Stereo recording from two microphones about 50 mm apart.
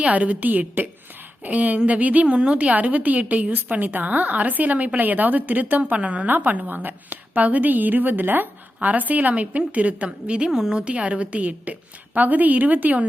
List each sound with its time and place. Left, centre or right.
0.0 s a woman's voice: right
6.2 s a woman's voice: right
8.9 s a woman's voice: right
10.5 s a woman's voice: centre; by 13.1 s right